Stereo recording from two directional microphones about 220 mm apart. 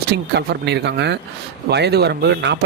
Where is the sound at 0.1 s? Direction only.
50° right (ahead or behind).